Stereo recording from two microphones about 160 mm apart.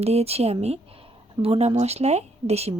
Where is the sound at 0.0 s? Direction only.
40° right (ahead or behind).